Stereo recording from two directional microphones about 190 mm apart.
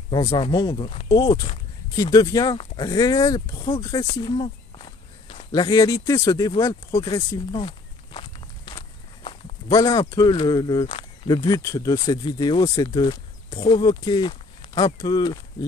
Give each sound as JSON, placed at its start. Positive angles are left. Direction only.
{"t": 0.1, "sound": "speech", "side_deg": 20}
{"t": 4.1, "sound": "walk", "side_deg": 25}
{"t": 5.5, "sound": "speech", "side_deg": 20}
{"t": 7.6, "sound": "walk", "side_deg": 30}
{"t": 9.7, "sound": "speech", "side_deg": 20}